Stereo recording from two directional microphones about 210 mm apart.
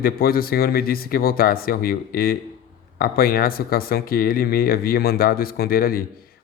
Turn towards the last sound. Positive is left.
turn(degrees=45)  # may be behind; listen again after turning